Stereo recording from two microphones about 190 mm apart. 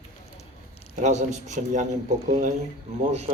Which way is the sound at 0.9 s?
35° right (ahead or behind).